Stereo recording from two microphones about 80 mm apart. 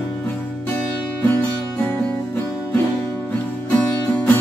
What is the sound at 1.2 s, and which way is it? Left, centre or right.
Music, left.